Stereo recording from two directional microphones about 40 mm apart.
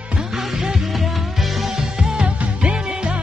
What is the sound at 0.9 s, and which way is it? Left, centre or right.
Music, centre.